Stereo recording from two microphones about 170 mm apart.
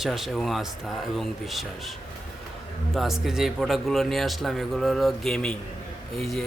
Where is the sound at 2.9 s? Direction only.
Centre (ahead or behind).